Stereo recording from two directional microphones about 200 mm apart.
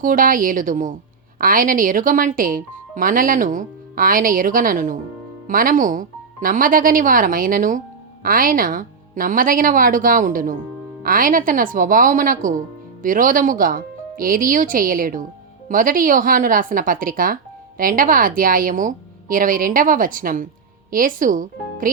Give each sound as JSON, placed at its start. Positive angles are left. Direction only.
{"t": 0.0, "sound": "speech", "side_deg": -45}